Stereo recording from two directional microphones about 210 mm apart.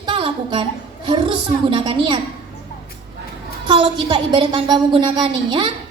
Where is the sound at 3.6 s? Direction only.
25° right (ahead or behind).